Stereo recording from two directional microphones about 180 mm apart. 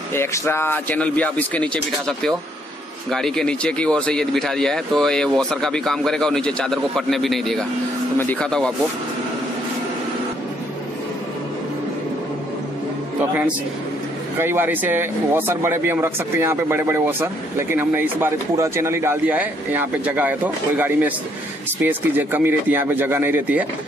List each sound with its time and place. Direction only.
0.1 s speech: 15° left (ahead or behind)
14.4 s speech: 10° right (ahead or behind)